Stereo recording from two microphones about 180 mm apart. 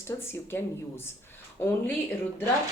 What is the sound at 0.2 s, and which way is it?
Speech, 15° left (ahead or behind).